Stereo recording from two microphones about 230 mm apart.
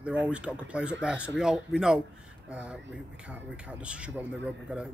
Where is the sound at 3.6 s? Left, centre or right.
Centre.